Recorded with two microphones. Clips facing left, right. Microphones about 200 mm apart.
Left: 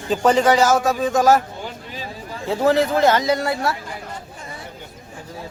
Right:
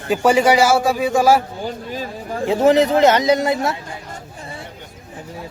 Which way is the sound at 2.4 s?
20° right (ahead or behind).